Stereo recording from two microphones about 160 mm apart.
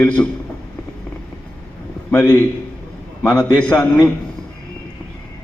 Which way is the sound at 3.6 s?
10° left (ahead or behind).